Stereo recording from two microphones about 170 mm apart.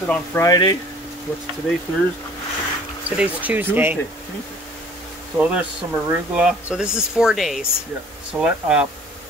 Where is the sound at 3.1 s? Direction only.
10° right (ahead or behind).